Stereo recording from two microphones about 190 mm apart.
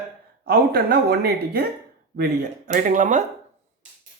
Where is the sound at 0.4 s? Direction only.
55° right (ahead or behind).